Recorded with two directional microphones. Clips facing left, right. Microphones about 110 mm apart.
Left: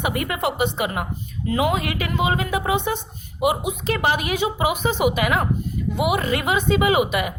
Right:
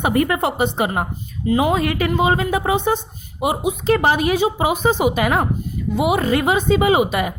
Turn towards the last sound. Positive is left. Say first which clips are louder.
# right 3 dB
turn(degrees=-35)  # may be behind; listen again after turning